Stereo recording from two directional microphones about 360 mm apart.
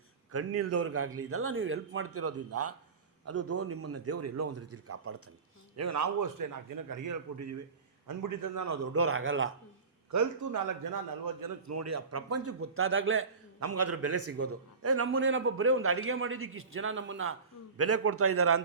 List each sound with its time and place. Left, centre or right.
0.3 s a man's voice: right
10.1 s a man's voice: right